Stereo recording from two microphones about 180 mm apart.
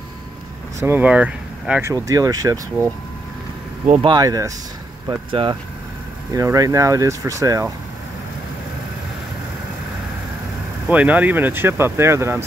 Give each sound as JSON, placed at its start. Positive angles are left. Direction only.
{"t": 0.7, "sound": "speech", "side_deg": -10}
{"t": 4.0, "sound": "speech", "side_deg": -25}
{"t": 10.9, "sound": "speech", "side_deg": -10}